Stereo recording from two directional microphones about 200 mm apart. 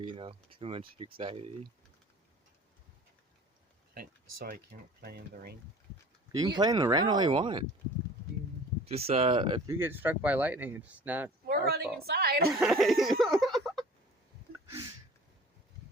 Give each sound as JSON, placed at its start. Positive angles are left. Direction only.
{"t": 0.1, "sound": "speech", "side_deg": -25}
{"t": 3.9, "sound": "speech", "side_deg": -45}
{"t": 6.3, "sound": "speech", "side_deg": -20}
{"t": 8.8, "sound": "speech", "side_deg": -30}
{"t": 9.7, "sound": "speech", "side_deg": -10}
{"t": 11.4, "sound": "a woman's voice", "side_deg": -50}
{"t": 12.5, "sound": "a sound", "side_deg": 0}
{"t": 14.5, "sound": "a sound", "side_deg": -15}